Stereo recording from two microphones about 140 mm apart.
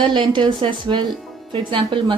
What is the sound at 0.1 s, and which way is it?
Speech, 35° right (ahead or behind).